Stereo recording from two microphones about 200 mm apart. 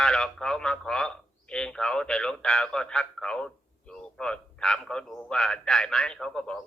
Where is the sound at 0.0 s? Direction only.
5° left (ahead or behind).